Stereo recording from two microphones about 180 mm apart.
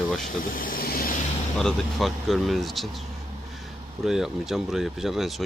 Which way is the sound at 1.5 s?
5° left (ahead or behind).